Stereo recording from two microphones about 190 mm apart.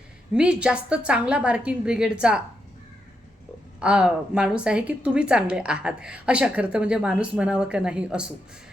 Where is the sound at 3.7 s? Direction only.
5° right (ahead or behind).